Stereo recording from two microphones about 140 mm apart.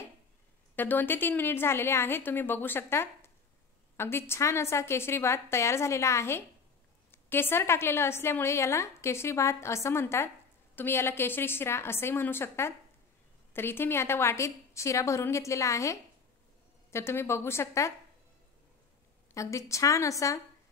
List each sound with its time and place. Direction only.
0.7 s a woman's voice: 15° left (ahead or behind)
19.3 s a woman's voice: 20° left (ahead or behind)